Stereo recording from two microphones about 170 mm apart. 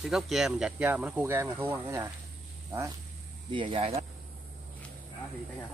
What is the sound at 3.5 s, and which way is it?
Speech, 30° right (ahead or behind).